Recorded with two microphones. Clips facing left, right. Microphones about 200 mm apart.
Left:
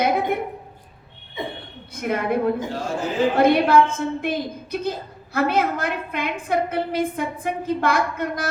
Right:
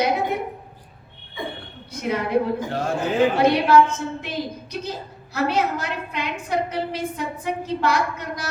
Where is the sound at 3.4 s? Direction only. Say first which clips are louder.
Left 3 dB; 55° left (ahead or behind).